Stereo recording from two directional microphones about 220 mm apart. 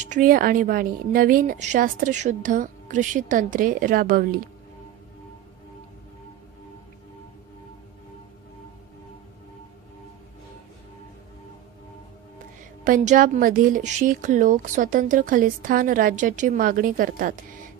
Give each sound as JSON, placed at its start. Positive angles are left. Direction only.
{"t": 0.0, "sound": "speech", "side_deg": -35}
{"t": 12.8, "sound": "speech", "side_deg": -35}